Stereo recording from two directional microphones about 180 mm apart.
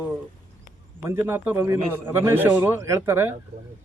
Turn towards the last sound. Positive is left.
turn(degrees=-15)  # may be behind; listen again after turning